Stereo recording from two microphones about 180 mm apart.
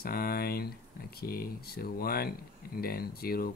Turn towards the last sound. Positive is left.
turn(degrees=55)  # may be behind; listen again after turning